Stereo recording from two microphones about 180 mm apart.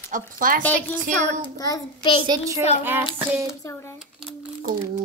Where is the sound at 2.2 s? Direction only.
20° right (ahead or behind).